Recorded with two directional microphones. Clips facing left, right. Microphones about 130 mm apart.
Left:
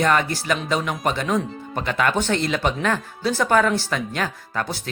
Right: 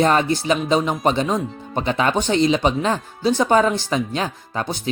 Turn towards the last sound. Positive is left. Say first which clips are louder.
# right 2 dB
turn(degrees=-20)  # may be behind; listen again after turning